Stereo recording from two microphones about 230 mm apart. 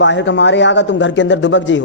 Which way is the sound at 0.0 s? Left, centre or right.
Left.